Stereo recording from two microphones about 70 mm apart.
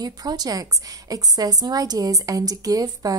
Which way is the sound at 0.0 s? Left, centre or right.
Right.